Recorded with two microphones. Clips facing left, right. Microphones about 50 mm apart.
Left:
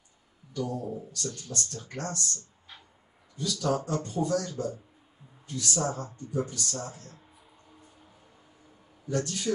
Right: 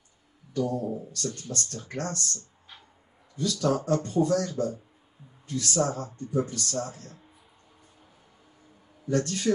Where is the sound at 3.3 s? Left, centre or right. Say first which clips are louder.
Right 3 dB; right.